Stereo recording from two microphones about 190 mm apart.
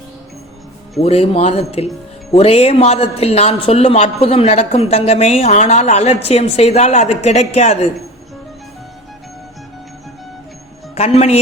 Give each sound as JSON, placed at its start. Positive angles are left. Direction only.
{"t": 0.9, "sound": "a man's voice", "side_deg": 35}
{"t": 10.9, "sound": "a man's voice", "side_deg": 35}